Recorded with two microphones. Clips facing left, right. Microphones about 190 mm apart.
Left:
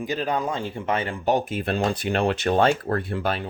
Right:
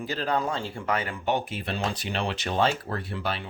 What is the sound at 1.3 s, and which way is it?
Speech, 45° left (ahead or behind).